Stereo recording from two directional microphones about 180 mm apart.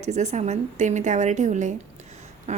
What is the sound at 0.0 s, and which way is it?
A woman's voice, 40° right (ahead or behind).